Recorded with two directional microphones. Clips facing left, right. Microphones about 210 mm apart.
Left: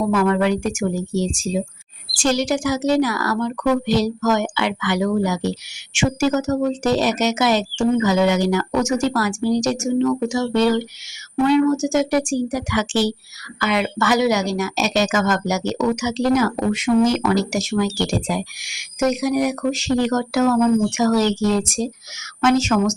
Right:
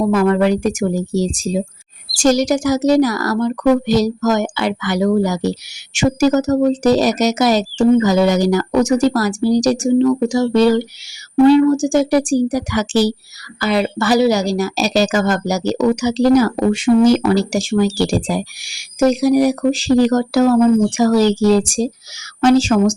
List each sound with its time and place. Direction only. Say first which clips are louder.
0.1 s speech: right 3 dB; 40° right (ahead or behind)